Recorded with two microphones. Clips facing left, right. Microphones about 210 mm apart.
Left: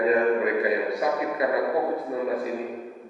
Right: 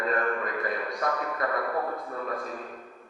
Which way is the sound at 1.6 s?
15° left (ahead or behind).